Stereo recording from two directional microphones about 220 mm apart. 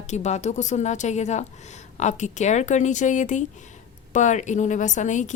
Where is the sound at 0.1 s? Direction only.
30° left (ahead or behind).